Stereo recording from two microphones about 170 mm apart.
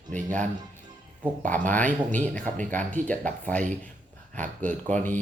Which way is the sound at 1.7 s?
10° left (ahead or behind).